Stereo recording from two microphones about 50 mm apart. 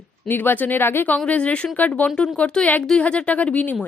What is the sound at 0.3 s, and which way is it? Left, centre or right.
Speech, left.